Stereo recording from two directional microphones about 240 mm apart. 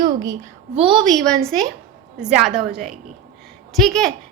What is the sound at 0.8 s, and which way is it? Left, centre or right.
Speech, centre.